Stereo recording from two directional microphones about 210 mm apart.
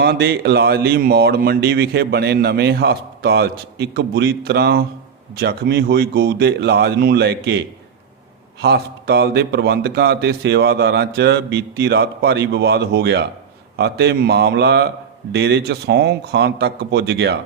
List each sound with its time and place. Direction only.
0.0 s speech: 50° right (ahead or behind)
8.6 s speech: 50° right (ahead or behind)